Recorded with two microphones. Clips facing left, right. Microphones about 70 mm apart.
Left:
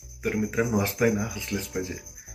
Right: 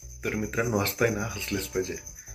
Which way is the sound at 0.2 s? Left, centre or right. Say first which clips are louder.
Left 3 dB; centre.